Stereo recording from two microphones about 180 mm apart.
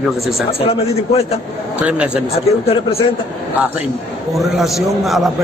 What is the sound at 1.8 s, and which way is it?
Speech, 5° right (ahead or behind).